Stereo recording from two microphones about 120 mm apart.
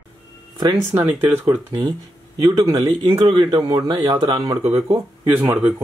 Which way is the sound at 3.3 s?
40° right (ahead or behind).